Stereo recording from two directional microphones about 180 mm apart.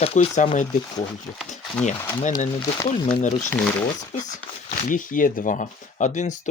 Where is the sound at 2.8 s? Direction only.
30° left (ahead or behind).